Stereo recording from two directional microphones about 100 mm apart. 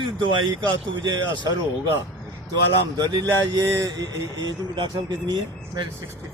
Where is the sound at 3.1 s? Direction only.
50° right (ahead or behind).